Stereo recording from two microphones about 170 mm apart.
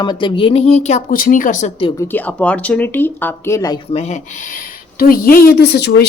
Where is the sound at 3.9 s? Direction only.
40° left (ahead or behind).